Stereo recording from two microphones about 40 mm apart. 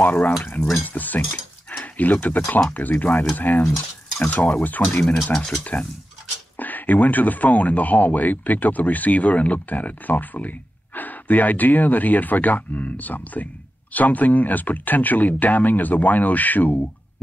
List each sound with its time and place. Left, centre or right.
0.0 s speech: left
2.2 s speech: left
5.0 s speech: centre
5.6 s speech: left
6.5 s speech: left